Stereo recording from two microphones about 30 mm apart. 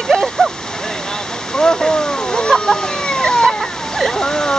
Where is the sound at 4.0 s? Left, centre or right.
Centre.